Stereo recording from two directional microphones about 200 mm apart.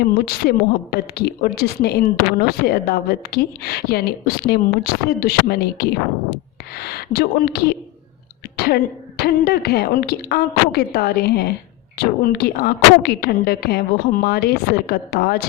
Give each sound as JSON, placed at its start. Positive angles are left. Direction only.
{"t": 0.0, "sound": "a woman's voice", "side_deg": 50}